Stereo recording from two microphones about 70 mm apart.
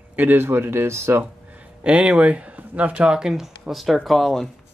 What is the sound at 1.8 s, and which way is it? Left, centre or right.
Speech, centre.